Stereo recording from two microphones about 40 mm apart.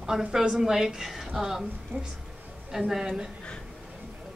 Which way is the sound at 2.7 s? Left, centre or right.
Centre.